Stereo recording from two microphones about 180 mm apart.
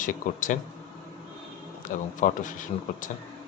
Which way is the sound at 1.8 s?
45° left (ahead or behind).